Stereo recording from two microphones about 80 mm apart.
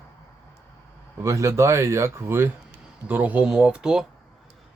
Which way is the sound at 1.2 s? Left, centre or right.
Right.